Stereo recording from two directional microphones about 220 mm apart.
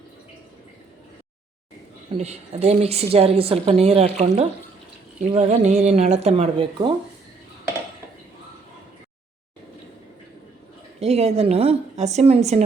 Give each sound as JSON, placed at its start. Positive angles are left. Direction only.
{"t": 2.1, "sound": "a woman's voice", "side_deg": -30}
{"t": 5.3, "sound": "a woman's voice", "side_deg": -30}
{"t": 11.0, "sound": "a woman's voice", "side_deg": -30}